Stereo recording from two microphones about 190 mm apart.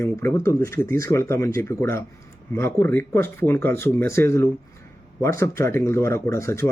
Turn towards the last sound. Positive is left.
turn(degrees=15)  # may be behind; listen again after turning